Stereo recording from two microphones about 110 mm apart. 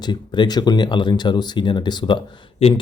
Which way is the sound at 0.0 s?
40° left (ahead or behind).